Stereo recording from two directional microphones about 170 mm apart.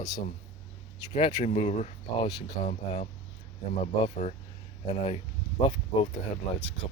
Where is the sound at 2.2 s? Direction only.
25° left (ahead or behind).